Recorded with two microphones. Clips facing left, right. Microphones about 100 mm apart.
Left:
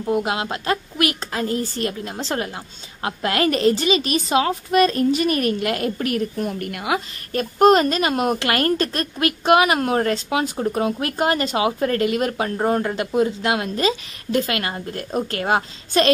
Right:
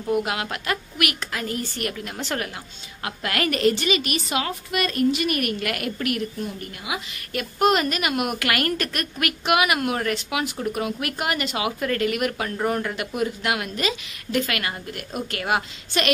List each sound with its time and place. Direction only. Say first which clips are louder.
0.0 s a woman's voice: left 2 dB; 25° left (ahead or behind)
6.3 s a woman's voice: left 6 dB; 60° left (ahead or behind)
7.3 s a woman's voice: left 6 dB; 35° left (ahead or behind)